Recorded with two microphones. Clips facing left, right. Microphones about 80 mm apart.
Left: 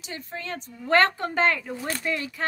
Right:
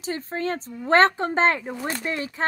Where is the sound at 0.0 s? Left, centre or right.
Right.